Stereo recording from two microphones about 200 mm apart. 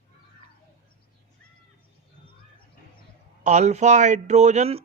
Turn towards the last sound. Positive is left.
turn(degrees=-30)  # may be behind; listen again after turning